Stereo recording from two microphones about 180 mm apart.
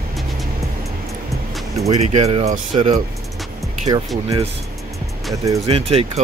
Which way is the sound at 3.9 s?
20° right (ahead or behind).